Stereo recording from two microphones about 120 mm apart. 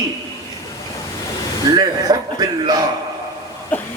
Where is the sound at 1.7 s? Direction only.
35° right (ahead or behind).